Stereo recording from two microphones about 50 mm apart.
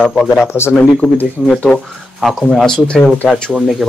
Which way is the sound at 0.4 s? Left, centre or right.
Left.